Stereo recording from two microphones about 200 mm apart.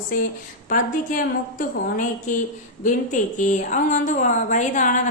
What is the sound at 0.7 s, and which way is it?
Speech, 40° left (ahead or behind).